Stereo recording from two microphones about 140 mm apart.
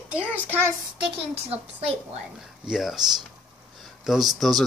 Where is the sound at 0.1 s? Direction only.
10° right (ahead or behind).